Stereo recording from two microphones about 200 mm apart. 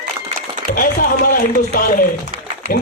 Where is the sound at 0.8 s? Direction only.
45° left (ahead or behind).